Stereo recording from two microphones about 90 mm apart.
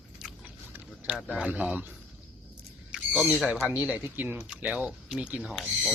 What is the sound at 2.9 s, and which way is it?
Owl, 10° right (ahead or behind).